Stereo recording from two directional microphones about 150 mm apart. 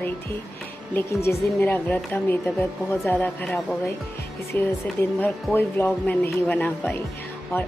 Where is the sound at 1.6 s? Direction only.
10° left (ahead or behind).